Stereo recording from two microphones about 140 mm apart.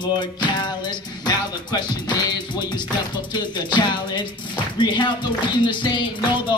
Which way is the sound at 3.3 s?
30° left (ahead or behind).